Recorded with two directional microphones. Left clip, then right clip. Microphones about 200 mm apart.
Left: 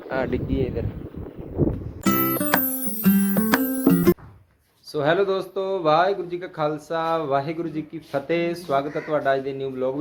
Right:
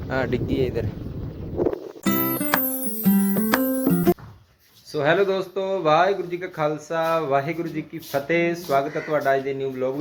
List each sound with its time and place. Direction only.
0.1 s speech: centre (ahead or behind)
0.5 s speech: 15° right (ahead or behind)
2.0 s music: centre (ahead or behind)
4.9 s speech: 5° left (ahead or behind)